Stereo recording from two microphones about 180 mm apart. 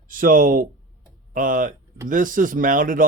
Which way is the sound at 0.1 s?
50° right (ahead or behind).